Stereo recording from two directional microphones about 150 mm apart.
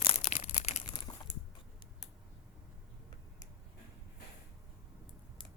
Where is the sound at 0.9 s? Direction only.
30° left (ahead or behind).